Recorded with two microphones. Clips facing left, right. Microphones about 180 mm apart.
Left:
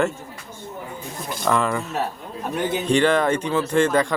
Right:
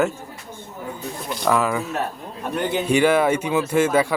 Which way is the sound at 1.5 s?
5° right (ahead or behind).